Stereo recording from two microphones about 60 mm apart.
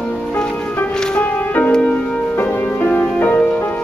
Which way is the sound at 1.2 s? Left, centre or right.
Left.